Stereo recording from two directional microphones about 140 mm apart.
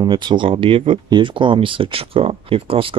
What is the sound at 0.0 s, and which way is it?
Speech, 35° right (ahead or behind).